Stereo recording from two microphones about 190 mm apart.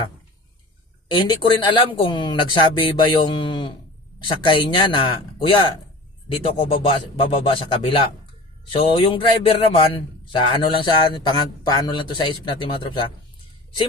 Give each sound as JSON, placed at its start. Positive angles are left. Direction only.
{"t": 1.0, "sound": "speech", "side_deg": 25}